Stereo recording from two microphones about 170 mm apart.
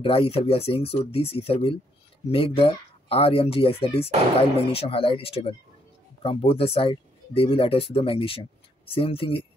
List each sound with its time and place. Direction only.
0.0 s speech: 35° left (ahead or behind)